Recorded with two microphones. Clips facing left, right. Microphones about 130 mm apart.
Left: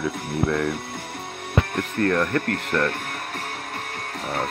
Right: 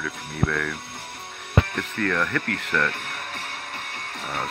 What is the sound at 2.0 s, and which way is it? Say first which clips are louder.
Speech: left 4 dB; 30° left (ahead or behind).